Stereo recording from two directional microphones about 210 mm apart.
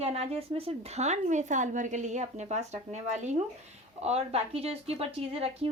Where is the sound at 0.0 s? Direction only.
30° right (ahead or behind).